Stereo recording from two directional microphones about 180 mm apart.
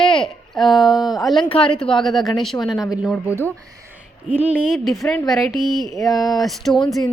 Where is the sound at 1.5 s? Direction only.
30° left (ahead or behind).